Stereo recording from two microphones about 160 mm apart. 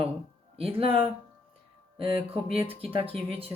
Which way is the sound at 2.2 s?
35° right (ahead or behind).